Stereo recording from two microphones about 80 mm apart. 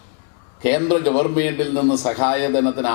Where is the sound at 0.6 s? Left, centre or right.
Centre.